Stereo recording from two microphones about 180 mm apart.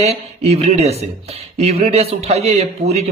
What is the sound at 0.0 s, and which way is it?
Speech, 35° right (ahead or behind).